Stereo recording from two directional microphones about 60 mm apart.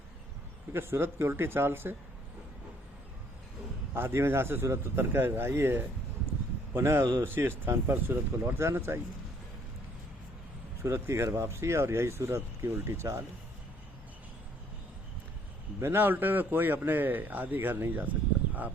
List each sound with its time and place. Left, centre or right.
0.7 s a man's voice: right
3.9 s a man's voice: right
10.8 s speech: right
15.8 s a man's voice: right